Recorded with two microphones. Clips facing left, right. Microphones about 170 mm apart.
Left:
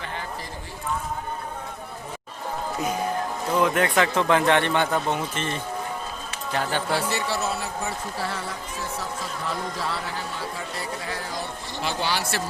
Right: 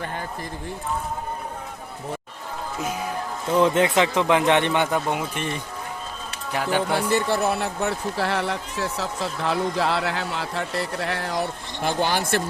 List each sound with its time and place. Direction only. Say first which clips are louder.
3.6 s speech: right 3 dB; 25° right (ahead or behind)
6.9 s speech: right 4 dB; 50° right (ahead or behind)